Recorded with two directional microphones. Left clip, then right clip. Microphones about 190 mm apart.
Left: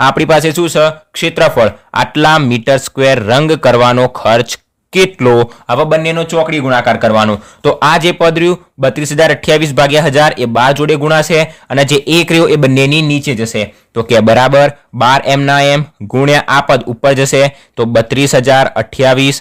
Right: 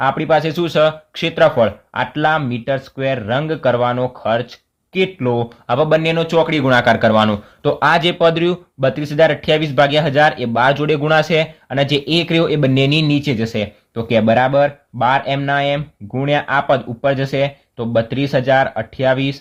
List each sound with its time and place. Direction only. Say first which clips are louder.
0.0 s speech: left 7 dB; 50° left (ahead or behind); by 1.5 s 30° left (ahead or behind)
1.5 s speech: left 5 dB; 45° left (ahead or behind)
5.6 s a man's voice: left 4 dB; 25° left (ahead or behind); by 7.1 s 5° left (ahead or behind)
7.1 s speech: left 4 dB; 20° left (ahead or behind)
7.6 s speech: left 5 dB; 35° left (ahead or behind)
13.9 s speech: left 7 dB; 45° left (ahead or behind)